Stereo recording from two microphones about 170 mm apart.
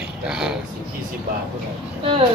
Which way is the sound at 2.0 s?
35° right (ahead or behind).